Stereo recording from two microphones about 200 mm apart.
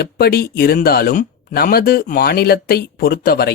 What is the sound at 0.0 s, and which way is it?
Speech, 50° left (ahead or behind).